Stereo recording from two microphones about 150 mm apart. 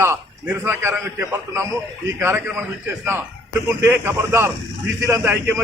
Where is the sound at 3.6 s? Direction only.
15° right (ahead or behind).